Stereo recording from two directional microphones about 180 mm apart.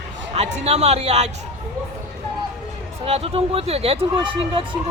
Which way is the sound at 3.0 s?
35° right (ahead or behind).